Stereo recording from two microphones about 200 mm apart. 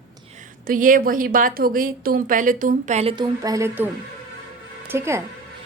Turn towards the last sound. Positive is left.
turn(degrees=-15)  # may be behind; listen again after turning